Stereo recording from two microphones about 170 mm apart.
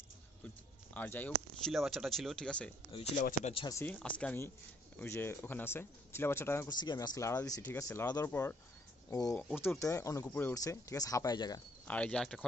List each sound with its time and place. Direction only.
0.9 s speech: 10° left (ahead or behind)
1.7 s speech: centre (ahead or behind)
2.9 s speech: 40° left (ahead or behind)
3.7 s speech: 10° left (ahead or behind)
9.4 s speech: 10° left (ahead or behind)
11.9 s speech: 5° left (ahead or behind)